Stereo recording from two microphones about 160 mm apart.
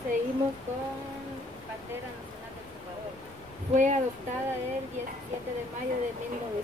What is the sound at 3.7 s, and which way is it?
Speech, 50° right (ahead or behind).